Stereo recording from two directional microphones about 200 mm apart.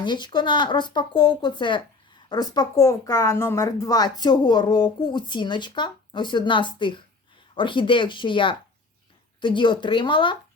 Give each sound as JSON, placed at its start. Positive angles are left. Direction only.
{"t": 0.0, "sound": "speech", "side_deg": 20}